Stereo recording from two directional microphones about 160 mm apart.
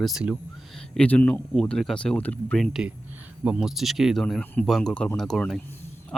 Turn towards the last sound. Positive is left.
turn(degrees=0)  # may be behind; listen again after turning